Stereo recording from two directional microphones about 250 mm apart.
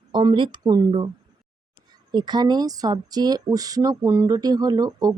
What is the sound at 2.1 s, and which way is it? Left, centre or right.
Speech, centre.